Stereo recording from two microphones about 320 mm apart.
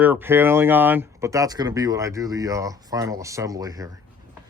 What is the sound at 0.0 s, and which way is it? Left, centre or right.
Speech, centre.